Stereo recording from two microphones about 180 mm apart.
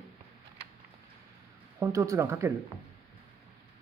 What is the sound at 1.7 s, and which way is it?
Speech, 15° right (ahead or behind).